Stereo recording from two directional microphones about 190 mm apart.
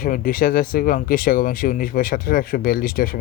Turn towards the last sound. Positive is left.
turn(degrees=50)  # may be behind; listen again after turning